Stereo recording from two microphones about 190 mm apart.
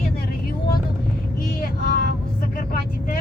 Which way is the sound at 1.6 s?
50° left (ahead or behind).